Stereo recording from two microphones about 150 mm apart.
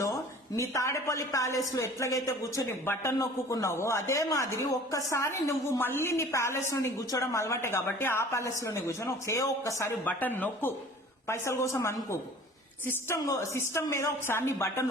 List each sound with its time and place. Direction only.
0.5 s a woman's voice: 20° left (ahead or behind)